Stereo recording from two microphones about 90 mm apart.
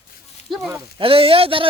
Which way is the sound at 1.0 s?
90° right.